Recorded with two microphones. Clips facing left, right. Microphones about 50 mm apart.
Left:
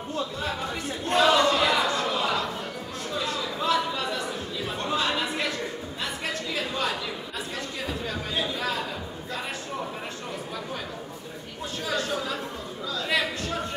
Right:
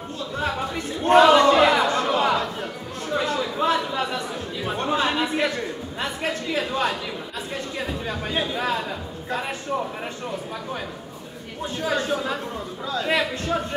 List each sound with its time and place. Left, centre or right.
1.0 s a sound: right
7.8 s speech: right
11.8 s a man's voice: right